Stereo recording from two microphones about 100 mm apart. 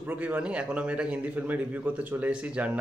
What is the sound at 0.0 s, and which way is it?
A man's voice, 15° right (ahead or behind).